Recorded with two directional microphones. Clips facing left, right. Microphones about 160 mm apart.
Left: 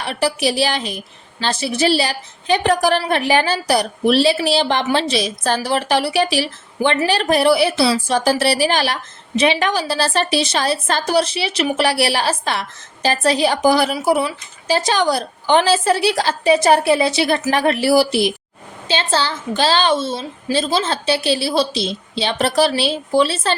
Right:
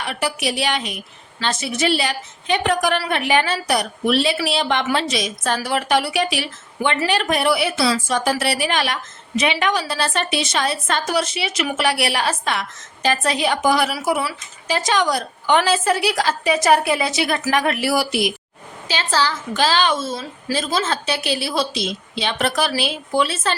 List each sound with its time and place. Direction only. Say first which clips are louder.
0.0 s a woman's voice: left 4 dB; 35° left (ahead or behind)